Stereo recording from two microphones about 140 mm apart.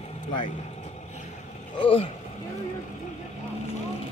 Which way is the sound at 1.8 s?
40° left (ahead or behind).